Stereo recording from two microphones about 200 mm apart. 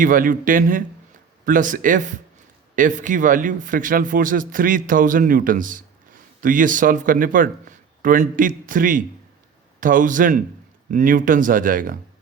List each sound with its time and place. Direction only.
0.0 s a man's voice: 40° right (ahead or behind)